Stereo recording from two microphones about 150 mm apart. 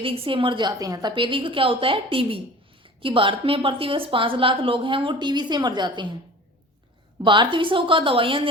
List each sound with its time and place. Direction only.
0.0 s a woman's voice: 40° right (ahead or behind)
7.3 s a woman's voice: 35° right (ahead or behind)